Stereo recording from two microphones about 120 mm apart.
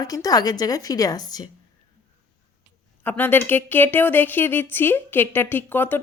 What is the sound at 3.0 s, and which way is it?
Speech, 15° left (ahead or behind).